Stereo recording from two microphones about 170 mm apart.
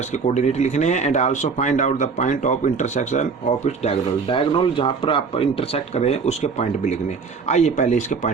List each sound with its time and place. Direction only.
0.3 s speech: 40° left (ahead or behind)